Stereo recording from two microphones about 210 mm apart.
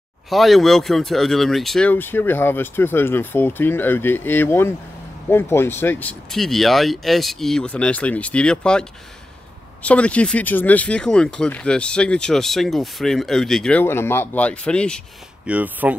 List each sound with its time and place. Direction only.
0.3 s speech: centre (ahead or behind)
9.8 s speech: 5° left (ahead or behind)
15.4 s speech: 5° right (ahead or behind)